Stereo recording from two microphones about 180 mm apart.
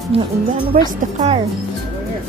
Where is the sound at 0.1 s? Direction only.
35° right (ahead or behind).